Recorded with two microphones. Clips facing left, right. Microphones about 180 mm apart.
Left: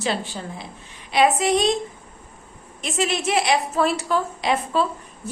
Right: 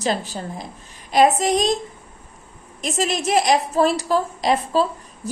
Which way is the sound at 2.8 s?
40° right (ahead or behind).